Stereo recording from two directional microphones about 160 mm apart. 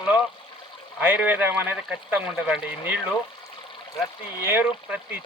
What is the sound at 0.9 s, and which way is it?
Speech, 10° right (ahead or behind).